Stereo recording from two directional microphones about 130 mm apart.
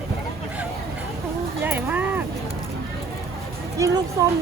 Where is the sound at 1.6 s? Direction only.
15° right (ahead or behind).